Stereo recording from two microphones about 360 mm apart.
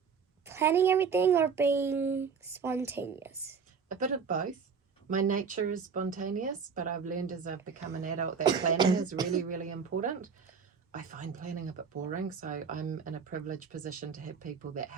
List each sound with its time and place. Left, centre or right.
0.4 s a child's voice: centre
3.8 s a woman's voice: right